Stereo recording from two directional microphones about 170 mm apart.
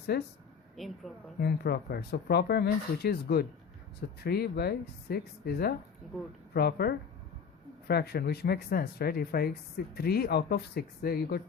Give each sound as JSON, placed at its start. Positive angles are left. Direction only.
{"t": 0.1, "sound": "speech", "side_deg": 70}
{"t": 0.8, "sound": "speech", "side_deg": 0}
{"t": 1.4, "sound": "speech", "side_deg": 65}